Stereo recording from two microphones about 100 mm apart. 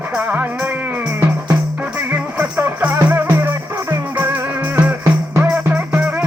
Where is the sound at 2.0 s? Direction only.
20° right (ahead or behind).